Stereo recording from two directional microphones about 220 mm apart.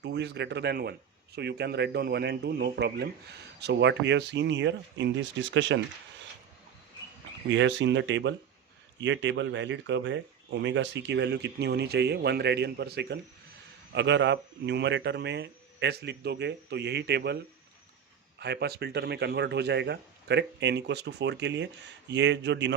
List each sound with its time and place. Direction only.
0.0 s speech: 50° right (ahead or behind)
7.5 s speech: 55° right (ahead or behind)